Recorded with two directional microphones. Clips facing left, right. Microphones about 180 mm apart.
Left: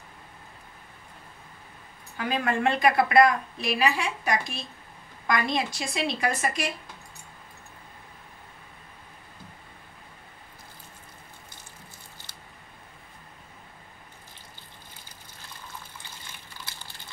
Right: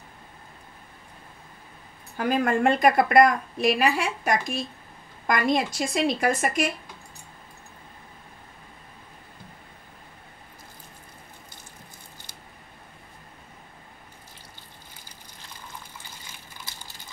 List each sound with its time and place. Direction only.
2.1 s a woman's voice: 45° right (ahead or behind)